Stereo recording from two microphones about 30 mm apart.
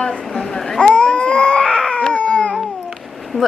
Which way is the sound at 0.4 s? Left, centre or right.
Centre.